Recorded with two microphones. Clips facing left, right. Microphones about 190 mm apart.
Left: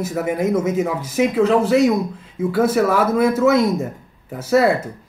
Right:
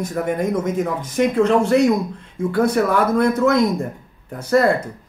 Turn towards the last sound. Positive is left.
turn(degrees=5)  # may be behind; listen again after turning